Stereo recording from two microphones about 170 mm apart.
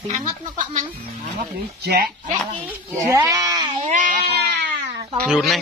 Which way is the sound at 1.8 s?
65° right (ahead or behind).